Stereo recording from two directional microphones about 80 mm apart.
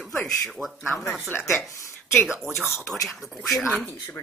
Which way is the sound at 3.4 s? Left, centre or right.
Centre.